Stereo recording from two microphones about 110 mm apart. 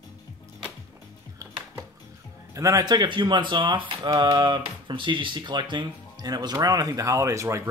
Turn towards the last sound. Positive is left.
turn(degrees=-25)  # may be behind; listen again after turning